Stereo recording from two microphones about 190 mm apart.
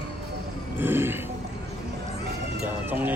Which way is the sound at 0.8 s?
10° right (ahead or behind).